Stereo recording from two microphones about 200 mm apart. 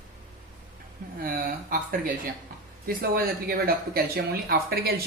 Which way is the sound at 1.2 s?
45° right (ahead or behind).